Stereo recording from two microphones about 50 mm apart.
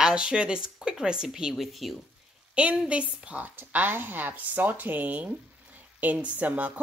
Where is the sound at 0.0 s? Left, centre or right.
Centre.